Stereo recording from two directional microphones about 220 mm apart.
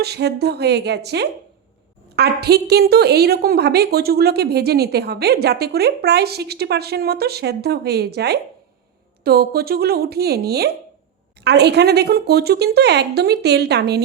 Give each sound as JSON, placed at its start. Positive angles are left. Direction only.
{"t": 0.0, "sound": "a woman's voice", "side_deg": -50}